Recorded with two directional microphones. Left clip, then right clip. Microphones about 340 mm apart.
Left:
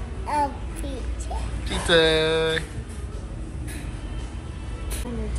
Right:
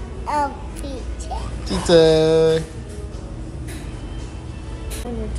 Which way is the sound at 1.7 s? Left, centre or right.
Centre.